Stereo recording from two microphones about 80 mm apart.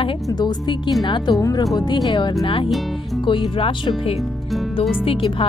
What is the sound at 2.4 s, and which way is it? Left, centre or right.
Speech, left.